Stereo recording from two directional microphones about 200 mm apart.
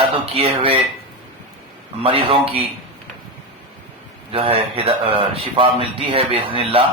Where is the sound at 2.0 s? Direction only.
25° right (ahead or behind).